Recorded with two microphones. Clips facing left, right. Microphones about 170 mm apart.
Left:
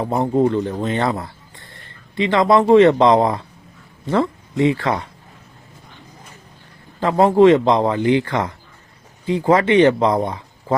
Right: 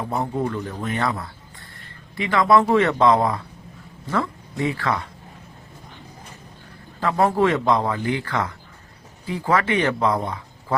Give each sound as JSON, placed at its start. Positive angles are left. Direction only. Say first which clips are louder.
{"t": 0.1, "sound": "speech", "louder": "left 9 dB", "side_deg": 25}
{"t": 7.2, "sound": "speech", "louder": "left 8 dB", "side_deg": 25}